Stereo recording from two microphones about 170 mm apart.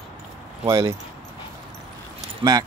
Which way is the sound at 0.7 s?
15° right (ahead or behind).